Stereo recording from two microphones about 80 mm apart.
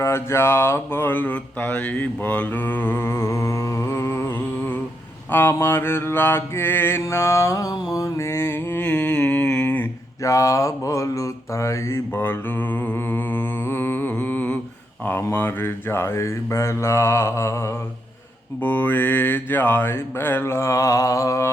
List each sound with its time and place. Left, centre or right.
0.0 s mantra: left
10.2 s mantra: left
12.1 s mantra: left
14.1 s music: left
15.2 s mantra: left
18.6 s mantra: left